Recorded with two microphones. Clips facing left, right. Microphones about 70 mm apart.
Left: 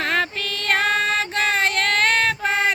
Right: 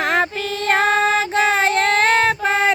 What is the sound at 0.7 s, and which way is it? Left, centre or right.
Female singing, right.